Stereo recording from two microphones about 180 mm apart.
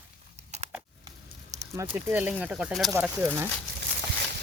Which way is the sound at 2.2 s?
10° right (ahead or behind).